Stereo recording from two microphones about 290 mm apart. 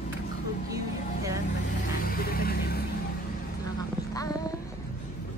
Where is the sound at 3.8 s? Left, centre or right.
Centre.